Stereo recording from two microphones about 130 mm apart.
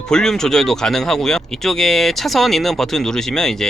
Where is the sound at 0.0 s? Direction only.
5° left (ahead or behind).